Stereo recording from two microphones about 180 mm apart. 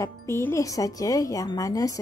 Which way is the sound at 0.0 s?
15° left (ahead or behind).